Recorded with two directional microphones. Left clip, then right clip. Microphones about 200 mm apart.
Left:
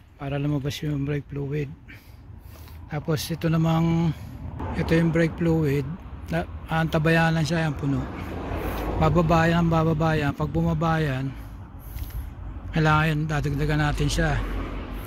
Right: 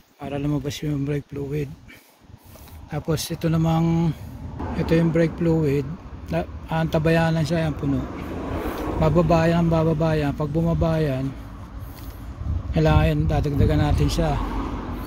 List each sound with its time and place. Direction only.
0.2 s speech: centre (ahead or behind)
2.9 s speech: 5° right (ahead or behind)
8.3 s vehicle: 45° right (ahead or behind)
9.0 s speech: 5° left (ahead or behind)
12.7 s speech: 5° left (ahead or behind)
14.4 s vehicle: 50° right (ahead or behind)